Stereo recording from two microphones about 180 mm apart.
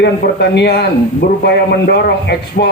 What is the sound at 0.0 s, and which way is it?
A man's voice, 70° left (ahead or behind).